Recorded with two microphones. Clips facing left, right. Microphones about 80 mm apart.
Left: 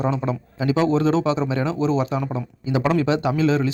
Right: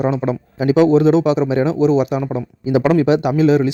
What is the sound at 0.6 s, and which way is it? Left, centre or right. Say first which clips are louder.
Speech: right 7 dB; right.